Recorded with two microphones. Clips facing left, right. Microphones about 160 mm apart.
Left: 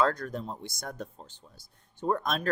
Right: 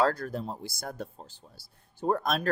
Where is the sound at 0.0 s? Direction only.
30° right (ahead or behind).